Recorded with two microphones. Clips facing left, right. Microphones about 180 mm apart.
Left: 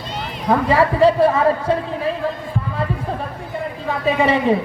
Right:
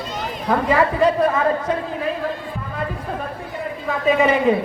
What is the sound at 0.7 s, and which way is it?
Speech, 30° left (ahead or behind).